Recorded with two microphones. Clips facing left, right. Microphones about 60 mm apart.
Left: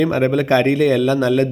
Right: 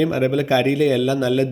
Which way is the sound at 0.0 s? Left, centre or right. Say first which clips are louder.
Left 2 dB; left.